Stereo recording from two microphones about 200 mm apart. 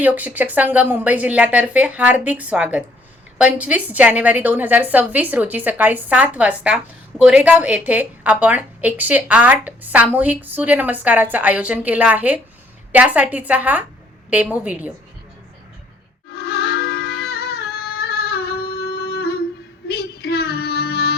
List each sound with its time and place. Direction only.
0.0 s a woman's voice: 10° right (ahead or behind)
16.3 s music: 55° left (ahead or behind)
19.9 s child singing: 55° left (ahead or behind)